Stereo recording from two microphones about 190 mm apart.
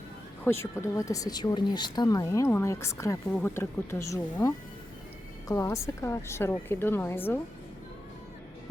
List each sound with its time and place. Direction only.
0.4 s speech: 15° left (ahead or behind)